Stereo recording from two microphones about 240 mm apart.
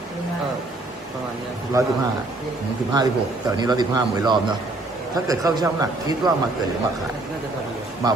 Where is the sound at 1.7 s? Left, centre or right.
Centre.